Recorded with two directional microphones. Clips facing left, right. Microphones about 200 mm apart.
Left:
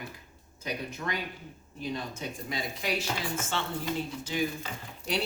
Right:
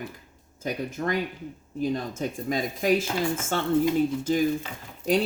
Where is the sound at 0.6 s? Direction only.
45° right (ahead or behind).